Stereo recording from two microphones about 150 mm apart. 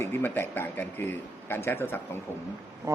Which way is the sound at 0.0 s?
15° left (ahead or behind).